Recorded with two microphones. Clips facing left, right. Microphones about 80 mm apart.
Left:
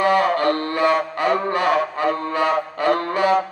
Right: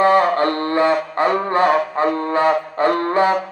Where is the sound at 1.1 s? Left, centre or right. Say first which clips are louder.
Right 3 dB; right.